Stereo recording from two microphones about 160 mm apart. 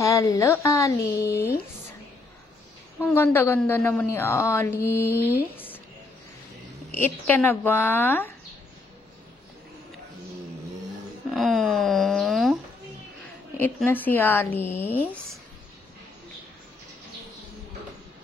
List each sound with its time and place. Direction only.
0.0 s a woman's voice: 20° left (ahead or behind)
3.0 s a woman's voice: 15° left (ahead or behind)
7.0 s a woman's voice: 15° left (ahead or behind)
11.2 s a sound: centre (ahead or behind)
13.8 s a woman's voice: 10° left (ahead or behind)